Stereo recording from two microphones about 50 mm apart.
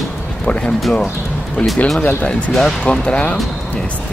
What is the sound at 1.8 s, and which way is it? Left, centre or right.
Speech, left.